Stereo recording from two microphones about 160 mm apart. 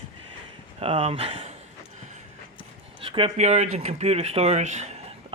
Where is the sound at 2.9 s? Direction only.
35° right (ahead or behind).